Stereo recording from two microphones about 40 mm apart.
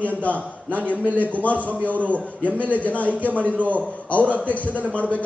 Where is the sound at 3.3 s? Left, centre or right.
Right.